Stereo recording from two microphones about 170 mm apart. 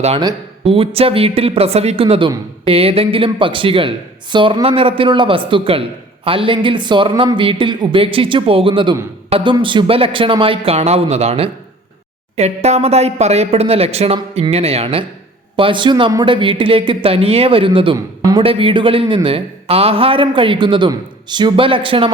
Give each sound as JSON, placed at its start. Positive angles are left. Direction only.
{"t": 0.6, "sound": "a man's voice", "side_deg": -35}
{"t": 18.4, "sound": "a man's voice", "side_deg": -35}